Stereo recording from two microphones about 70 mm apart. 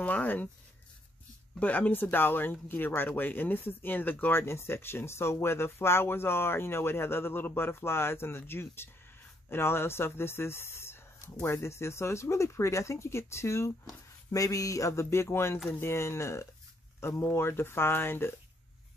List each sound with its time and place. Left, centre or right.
0.0 s speech: left
1.6 s speech: left
13.8 s speech: left